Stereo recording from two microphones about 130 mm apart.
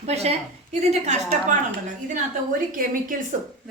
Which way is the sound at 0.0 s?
55° right (ahead or behind).